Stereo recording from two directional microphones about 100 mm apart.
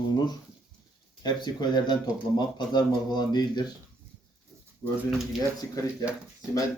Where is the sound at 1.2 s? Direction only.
45° left (ahead or behind).